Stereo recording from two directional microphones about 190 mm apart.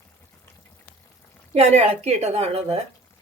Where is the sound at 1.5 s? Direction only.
35° right (ahead or behind).